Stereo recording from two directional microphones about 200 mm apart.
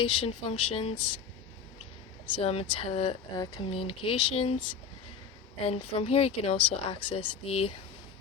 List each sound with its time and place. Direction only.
0.0 s speech: 25° left (ahead or behind)
2.3 s speech: 30° left (ahead or behind)
5.6 s speech: 30° left (ahead or behind)